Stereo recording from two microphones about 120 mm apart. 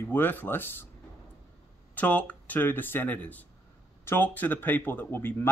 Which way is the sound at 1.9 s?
15° left (ahead or behind).